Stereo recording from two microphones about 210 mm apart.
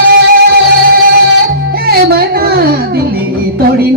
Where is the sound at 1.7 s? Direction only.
45° right (ahead or behind).